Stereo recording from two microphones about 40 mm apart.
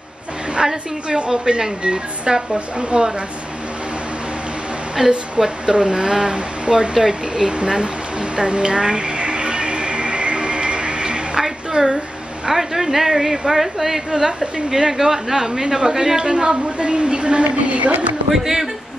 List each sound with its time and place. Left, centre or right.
0.6 s speech: right
5.0 s speech: centre
7.4 s a sound: right
11.3 s a sound: centre
12.4 s speech: centre
14.1 s speech: right
14.7 s speech: centre; by 18.1 s right
18.3 s speech: centre